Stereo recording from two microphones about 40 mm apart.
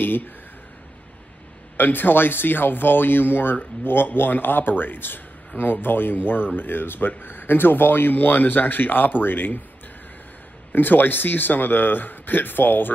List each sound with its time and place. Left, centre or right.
0.0 s speech: left
1.8 s speech: left
10.7 s speech: left